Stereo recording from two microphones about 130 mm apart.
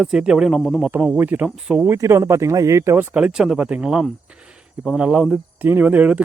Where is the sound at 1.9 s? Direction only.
20° right (ahead or behind).